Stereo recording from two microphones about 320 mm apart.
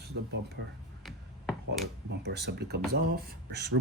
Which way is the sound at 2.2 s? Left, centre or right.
Right.